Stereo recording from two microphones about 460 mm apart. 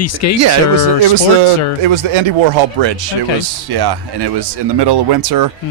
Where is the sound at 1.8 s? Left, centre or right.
Right.